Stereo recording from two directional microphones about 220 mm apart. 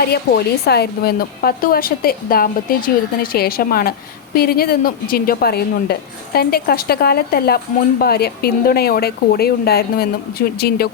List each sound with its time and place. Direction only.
0.0 s a woman's voice: 45° left (ahead or behind)